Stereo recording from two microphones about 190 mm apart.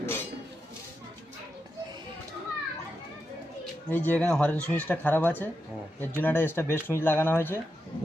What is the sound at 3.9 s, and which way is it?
Speech, 10° left (ahead or behind).